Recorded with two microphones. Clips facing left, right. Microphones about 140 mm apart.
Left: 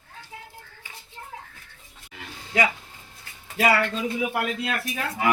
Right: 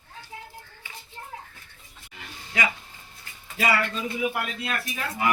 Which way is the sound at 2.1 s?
70° left (ahead or behind).